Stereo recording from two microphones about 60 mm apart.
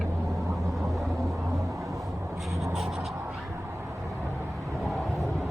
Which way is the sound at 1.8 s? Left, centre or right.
Right.